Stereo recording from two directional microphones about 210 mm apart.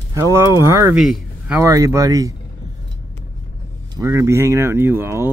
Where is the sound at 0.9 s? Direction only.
Centre (ahead or behind).